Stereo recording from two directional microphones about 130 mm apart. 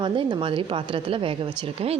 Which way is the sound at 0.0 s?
35° right (ahead or behind).